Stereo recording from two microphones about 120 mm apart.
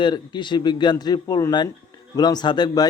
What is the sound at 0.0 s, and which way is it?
A man's voice, 40° left (ahead or behind).